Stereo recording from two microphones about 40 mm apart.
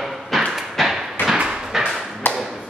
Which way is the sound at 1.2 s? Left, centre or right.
Left.